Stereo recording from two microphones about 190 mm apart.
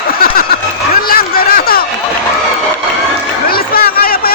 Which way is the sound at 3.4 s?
50° left (ahead or behind).